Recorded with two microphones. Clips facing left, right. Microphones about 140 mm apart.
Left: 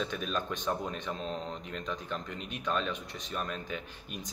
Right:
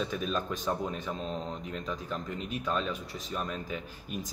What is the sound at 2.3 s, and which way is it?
Speech, 40° right (ahead or behind).